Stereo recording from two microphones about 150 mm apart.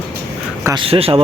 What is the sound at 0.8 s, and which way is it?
Speech, 40° right (ahead or behind).